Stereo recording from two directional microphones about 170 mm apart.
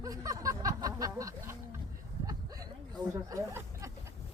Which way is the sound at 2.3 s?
20° right (ahead or behind).